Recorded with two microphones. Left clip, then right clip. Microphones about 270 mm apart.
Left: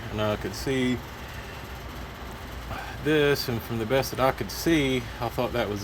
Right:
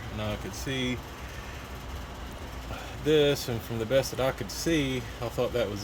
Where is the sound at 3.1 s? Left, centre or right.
Centre.